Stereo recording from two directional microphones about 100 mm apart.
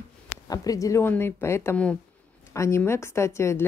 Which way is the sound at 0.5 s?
35° left (ahead or behind).